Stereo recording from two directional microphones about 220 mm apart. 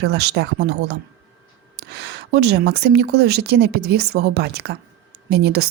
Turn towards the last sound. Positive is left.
turn(degrees=-50)  # may be behind; listen again after turning